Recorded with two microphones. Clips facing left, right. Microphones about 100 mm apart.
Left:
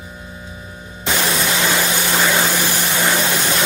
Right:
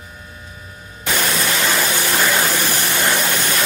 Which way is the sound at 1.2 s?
10° left (ahead or behind).